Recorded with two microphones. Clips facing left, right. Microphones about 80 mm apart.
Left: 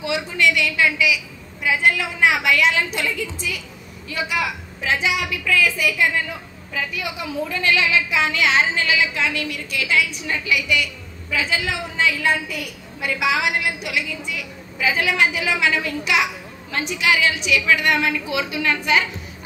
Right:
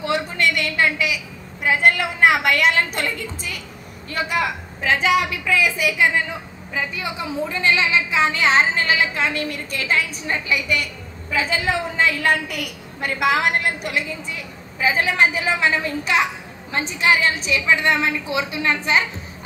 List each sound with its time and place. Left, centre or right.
0.0 s a woman's voice: right
5.3 s a woman's voice: centre; by 13.1 s right
13.1 s a woman's voice: right